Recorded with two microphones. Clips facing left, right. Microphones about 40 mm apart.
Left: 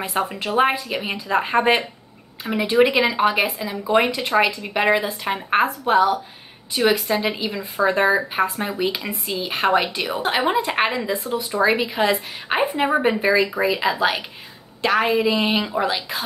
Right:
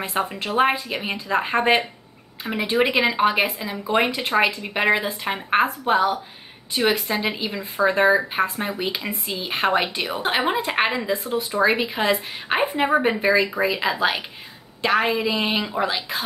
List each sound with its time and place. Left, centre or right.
0.0 s a woman's voice: centre
3.6 s a woman's voice: centre